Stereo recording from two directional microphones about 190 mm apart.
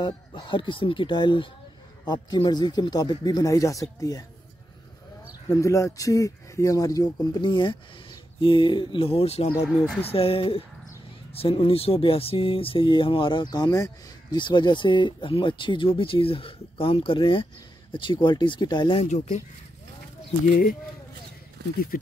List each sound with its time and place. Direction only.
0.0 s speech: 25° left (ahead or behind)
5.5 s speech: 15° left (ahead or behind)
19.0 s speech: 40° left (ahead or behind)
20.4 s speech: 45° left (ahead or behind)